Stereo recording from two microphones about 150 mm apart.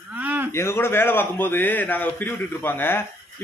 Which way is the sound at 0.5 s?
15° left (ahead or behind).